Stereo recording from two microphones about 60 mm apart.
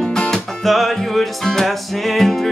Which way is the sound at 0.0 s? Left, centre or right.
Centre.